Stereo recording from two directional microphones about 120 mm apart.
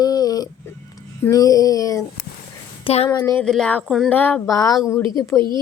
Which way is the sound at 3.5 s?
5° left (ahead or behind).